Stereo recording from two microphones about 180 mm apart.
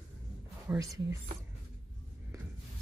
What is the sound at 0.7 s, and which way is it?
Speech, 20° right (ahead or behind).